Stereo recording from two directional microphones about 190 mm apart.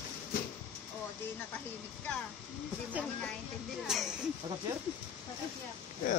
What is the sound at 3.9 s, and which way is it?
Speech, centre (ahead or behind).